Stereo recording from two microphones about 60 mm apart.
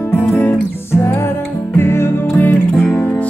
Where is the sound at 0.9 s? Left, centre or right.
Left.